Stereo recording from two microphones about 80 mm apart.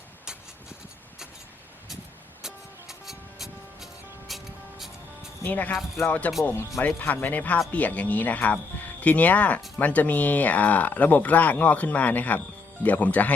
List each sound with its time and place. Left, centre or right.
2.4 s music: centre
5.4 s speech: left